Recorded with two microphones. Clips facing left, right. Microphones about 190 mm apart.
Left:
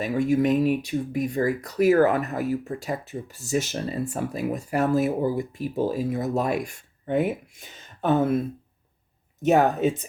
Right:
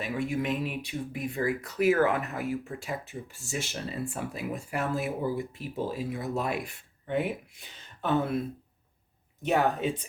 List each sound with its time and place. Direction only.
0.0 s speech: 40° left (ahead or behind)
9.4 s speech: 45° left (ahead or behind)